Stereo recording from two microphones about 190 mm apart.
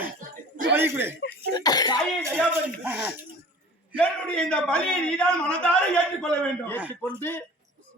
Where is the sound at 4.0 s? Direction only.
5° left (ahead or behind).